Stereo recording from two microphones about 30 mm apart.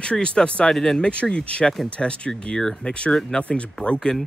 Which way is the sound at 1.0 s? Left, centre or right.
Left.